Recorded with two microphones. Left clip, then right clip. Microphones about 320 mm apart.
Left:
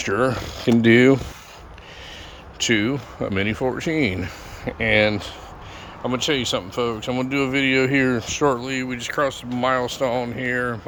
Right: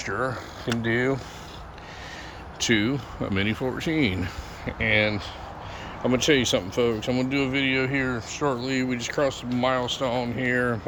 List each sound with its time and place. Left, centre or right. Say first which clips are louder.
0.0 s mechanisms: left 7 dB; left
2.6 s speech: left 3 dB; centre
6.0 s speech: right 1 dB; centre; by 8.6 s left
8.6 s speech: left 1 dB; centre